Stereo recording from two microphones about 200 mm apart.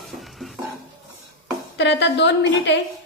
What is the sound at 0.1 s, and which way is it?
Dishes, centre (ahead or behind).